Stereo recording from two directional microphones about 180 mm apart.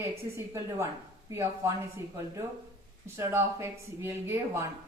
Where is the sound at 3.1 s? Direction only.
15° right (ahead or behind).